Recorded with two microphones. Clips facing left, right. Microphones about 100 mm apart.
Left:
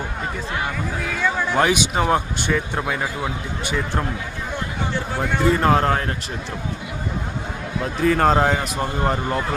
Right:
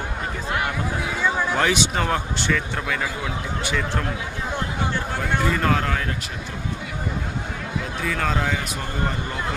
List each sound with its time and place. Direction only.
1.0 s a sound: 10° right (ahead or behind)
1.5 s speech: 15° left (ahead or behind)
5.5 s speech: 30° left (ahead or behind)
8.0 s a man's voice: 45° left (ahead or behind)